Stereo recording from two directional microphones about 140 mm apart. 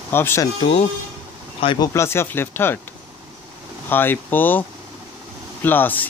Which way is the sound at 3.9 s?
15° left (ahead or behind).